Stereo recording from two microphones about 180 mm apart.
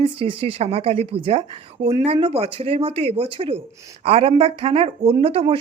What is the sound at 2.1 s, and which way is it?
Speech, 35° right (ahead or behind).